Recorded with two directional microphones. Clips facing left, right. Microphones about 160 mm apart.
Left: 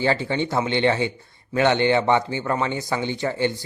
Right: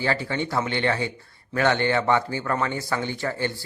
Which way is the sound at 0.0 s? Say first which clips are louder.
Left 4 dB; 25° left (ahead or behind).